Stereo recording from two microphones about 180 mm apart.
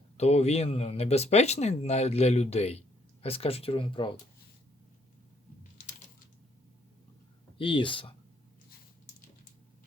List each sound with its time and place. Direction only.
0.2 s speech: 35° left (ahead or behind)
7.6 s speech: 30° left (ahead or behind)